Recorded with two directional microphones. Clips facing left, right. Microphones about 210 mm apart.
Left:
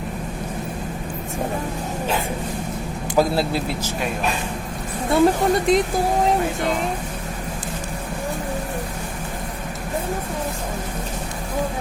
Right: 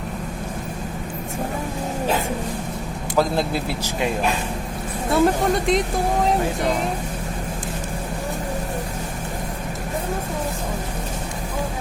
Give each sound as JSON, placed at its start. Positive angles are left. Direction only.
{"t": 3.2, "sound": "speech", "side_deg": 5}
{"t": 5.1, "sound": "speech", "side_deg": 0}